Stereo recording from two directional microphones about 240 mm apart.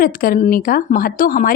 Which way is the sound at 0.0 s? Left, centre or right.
Left.